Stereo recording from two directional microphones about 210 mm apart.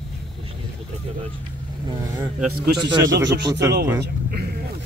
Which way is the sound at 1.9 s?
15° right (ahead or behind).